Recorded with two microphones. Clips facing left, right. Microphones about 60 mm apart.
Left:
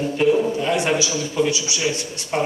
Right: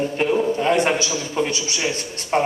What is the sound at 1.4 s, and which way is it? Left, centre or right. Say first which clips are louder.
Speech: left 2 dB; right.